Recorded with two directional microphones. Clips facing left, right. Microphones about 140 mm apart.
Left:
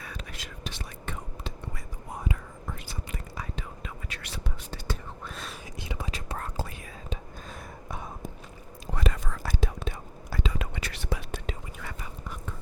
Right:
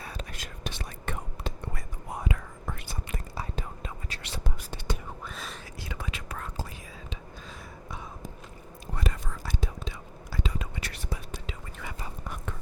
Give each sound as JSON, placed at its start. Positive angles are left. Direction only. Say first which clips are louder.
{"t": 0.0, "sound": "whispering", "louder": "right 1 dB", "side_deg": -35}
{"t": 2.2, "sound": "whispering", "louder": "even", "side_deg": -85}
{"t": 3.3, "sound": "whispering", "louder": "right 3 dB", "side_deg": -35}
{"t": 5.2, "sound": "whispering", "louder": "even", "side_deg": 0}
{"t": 5.8, "sound": "whispering", "louder": "left 3 dB", "side_deg": 20}
{"t": 6.1, "sound": "whispering", "louder": "left 2 dB", "side_deg": 35}
{"t": 6.6, "sound": "whispering", "louder": "left 3 dB", "side_deg": 60}
{"t": 8.9, "sound": "whispering", "louder": "left 3 dB", "side_deg": 90}
{"t": 9.6, "sound": "whispering", "louder": "left 6 dB", "side_deg": 65}
{"t": 10.5, "sound": "whispering", "louder": "left 2 dB", "side_deg": 80}